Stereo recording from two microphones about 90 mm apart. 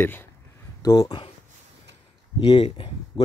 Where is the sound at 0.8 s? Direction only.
40° left (ahead or behind).